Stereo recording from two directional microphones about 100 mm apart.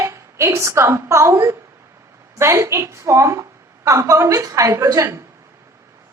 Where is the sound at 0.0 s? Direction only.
30° right (ahead or behind).